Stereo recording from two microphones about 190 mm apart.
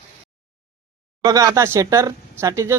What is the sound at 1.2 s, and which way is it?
Speech, 15° right (ahead or behind).